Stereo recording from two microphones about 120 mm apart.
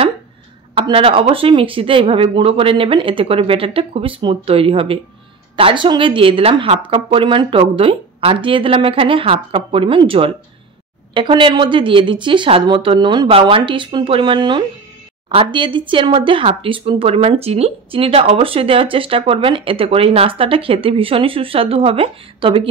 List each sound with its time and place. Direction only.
0.7 s speech: 45° right (ahead or behind)